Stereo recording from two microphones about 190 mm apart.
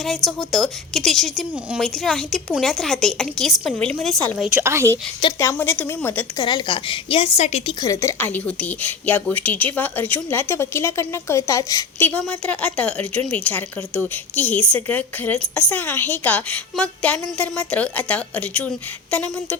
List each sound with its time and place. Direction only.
0.3 s a woman's voice: centre (ahead or behind)
4.5 s a woman's voice: 15° right (ahead or behind)
5.4 s speech: 10° left (ahead or behind)
6.3 s a woman's voice: 25° left (ahead or behind)
7.8 s speech: 15° left (ahead or behind)